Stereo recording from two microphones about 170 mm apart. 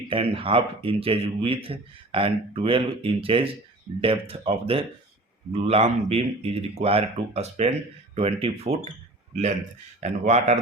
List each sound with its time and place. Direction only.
0.1 s a man's voice: 30° right (ahead or behind)